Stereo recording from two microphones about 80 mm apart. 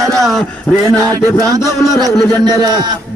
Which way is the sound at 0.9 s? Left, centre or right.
Right.